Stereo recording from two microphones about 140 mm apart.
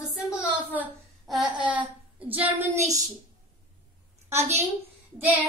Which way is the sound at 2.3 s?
15° right (ahead or behind).